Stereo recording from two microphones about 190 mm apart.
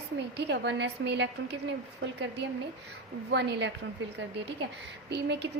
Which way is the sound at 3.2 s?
65° right (ahead or behind).